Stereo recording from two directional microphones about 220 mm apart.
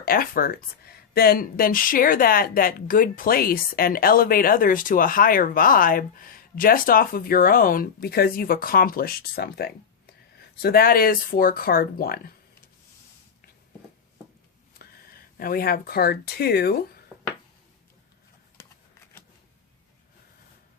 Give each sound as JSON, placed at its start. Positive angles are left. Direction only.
{"t": 0.0, "sound": "speech", "side_deg": 40}
{"t": 14.8, "sound": "speech", "side_deg": 40}
{"t": 17.1, "sound": "a sound", "side_deg": 10}